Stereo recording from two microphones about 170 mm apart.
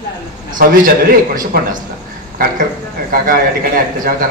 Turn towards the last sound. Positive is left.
turn(degrees=-55)  # may be behind; listen again after turning